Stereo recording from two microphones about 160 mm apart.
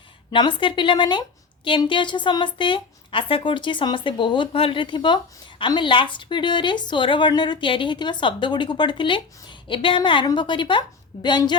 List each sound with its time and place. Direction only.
0.3 s a woman's voice: 30° left (ahead or behind)